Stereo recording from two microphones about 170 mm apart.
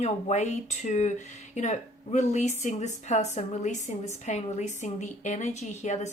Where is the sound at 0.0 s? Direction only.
40° left (ahead or behind).